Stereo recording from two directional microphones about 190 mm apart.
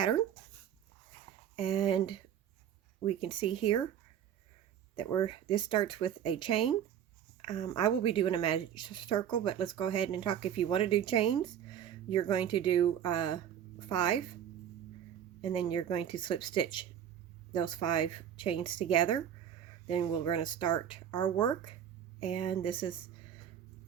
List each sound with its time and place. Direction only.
1.5 s a woman's voice: 30° left (ahead or behind)
4.9 s a woman's voice: 25° left (ahead or behind)
15.4 s a woman's voice: 25° left (ahead or behind)